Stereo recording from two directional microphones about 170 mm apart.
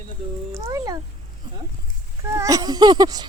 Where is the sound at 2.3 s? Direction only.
20° right (ahead or behind).